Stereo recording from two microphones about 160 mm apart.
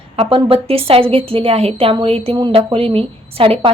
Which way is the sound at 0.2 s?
35° right (ahead or behind).